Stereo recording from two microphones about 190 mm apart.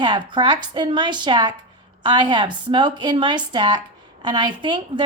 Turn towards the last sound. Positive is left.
turn(degrees=-25)  # may be behind; listen again after turning